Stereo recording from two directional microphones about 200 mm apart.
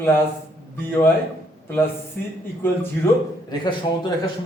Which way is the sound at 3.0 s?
10° left (ahead or behind).